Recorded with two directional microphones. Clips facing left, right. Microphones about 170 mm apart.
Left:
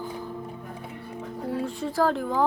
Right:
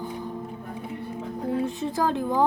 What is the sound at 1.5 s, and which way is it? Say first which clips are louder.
Speech: right 3 dB; 20° right (ahead or behind).